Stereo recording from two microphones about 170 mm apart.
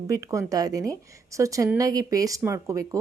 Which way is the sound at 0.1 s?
20° right (ahead or behind).